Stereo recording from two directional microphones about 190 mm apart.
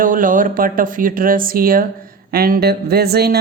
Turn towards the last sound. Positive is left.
turn(degrees=-55)  # may be behind; listen again after turning